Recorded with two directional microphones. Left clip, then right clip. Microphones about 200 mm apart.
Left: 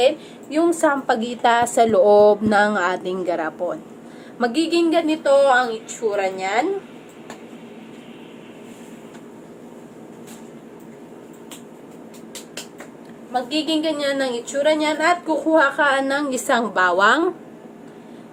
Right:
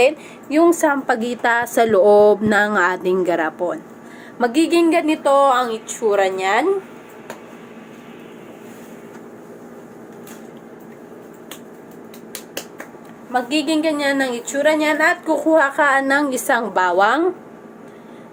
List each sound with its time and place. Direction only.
0.5 s a woman's voice: 15° right (ahead or behind)
13.3 s a woman's voice: 15° right (ahead or behind); by 17.2 s 10° left (ahead or behind)